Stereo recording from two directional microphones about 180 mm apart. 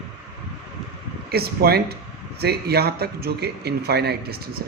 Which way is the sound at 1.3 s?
60° right (ahead or behind).